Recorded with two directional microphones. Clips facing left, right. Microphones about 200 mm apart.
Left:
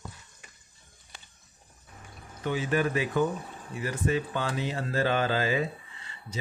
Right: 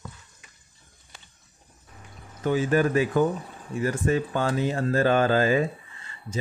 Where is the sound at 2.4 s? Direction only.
45° right (ahead or behind).